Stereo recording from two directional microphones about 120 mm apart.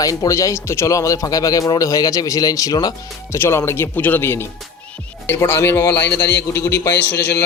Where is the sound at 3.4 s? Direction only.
20° left (ahead or behind).